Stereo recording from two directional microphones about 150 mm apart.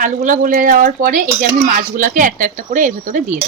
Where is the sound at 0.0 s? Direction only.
60° right (ahead or behind).